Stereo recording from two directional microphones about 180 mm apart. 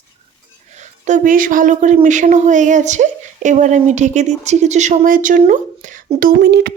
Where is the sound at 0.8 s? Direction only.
45° right (ahead or behind).